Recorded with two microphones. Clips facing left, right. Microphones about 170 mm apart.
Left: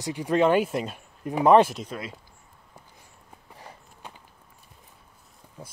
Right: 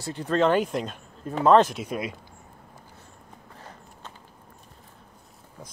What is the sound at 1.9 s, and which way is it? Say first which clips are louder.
Speech: right 5 dB; 15° right (ahead or behind).